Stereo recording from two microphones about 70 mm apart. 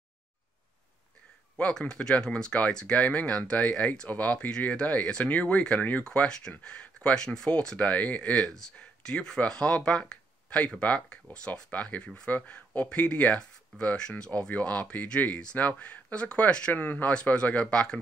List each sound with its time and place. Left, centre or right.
1.6 s speech: centre
6.0 s speech: centre